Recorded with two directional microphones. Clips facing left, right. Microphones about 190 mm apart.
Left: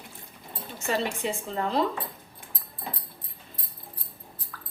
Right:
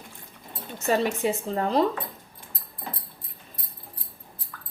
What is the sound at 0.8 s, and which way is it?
Speech, 40° right (ahead or behind).